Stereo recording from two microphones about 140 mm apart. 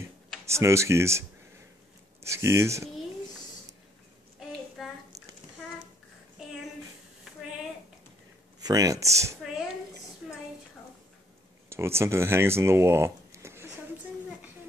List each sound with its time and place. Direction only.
0.5 s speech: 20° right (ahead or behind)
2.2 s speech: 20° right (ahead or behind)
8.5 s speech: 25° right (ahead or behind)
11.7 s speech: 20° right (ahead or behind)